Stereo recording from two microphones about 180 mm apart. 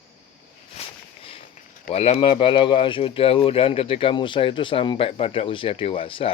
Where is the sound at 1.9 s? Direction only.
35° left (ahead or behind).